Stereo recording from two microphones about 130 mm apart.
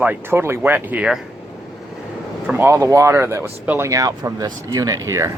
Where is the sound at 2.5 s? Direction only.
15° right (ahead or behind).